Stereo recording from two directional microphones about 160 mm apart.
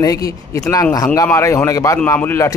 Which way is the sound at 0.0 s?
20° left (ahead or behind).